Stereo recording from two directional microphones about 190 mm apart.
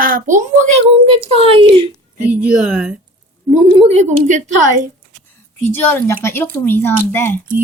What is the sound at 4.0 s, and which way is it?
Speech, 40° right (ahead or behind).